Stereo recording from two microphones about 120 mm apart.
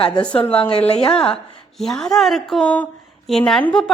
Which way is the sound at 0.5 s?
50° left (ahead or behind).